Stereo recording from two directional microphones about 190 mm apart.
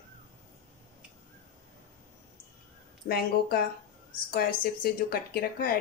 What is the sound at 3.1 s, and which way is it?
Speech, 50° left (ahead or behind).